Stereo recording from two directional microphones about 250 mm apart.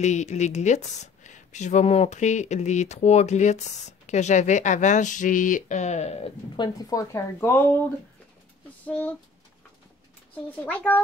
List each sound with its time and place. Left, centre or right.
0.0 s speech: left; by 7.7 s centre
8.8 s speech: centre
10.3 s a child's voice: centre